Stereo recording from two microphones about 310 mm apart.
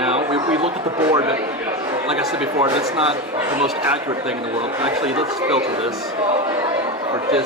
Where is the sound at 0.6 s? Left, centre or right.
Centre.